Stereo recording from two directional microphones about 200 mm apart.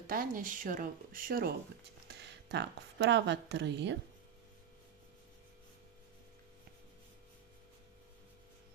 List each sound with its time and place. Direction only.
0.1 s speech: 45° right (ahead or behind)
2.0 s a woman's voice: 60° right (ahead or behind)